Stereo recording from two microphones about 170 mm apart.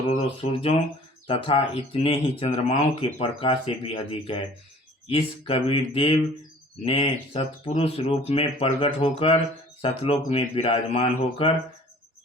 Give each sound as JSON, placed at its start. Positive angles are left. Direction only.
{"t": 0.2, "sound": "speech", "side_deg": 35}